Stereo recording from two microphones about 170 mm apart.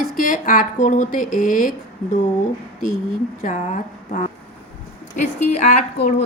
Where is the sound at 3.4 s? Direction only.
45° left (ahead or behind).